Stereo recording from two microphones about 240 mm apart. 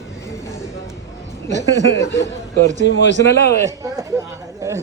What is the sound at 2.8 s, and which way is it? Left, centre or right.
Speech, left.